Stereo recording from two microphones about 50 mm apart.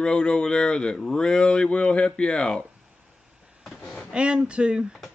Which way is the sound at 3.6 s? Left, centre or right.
Centre.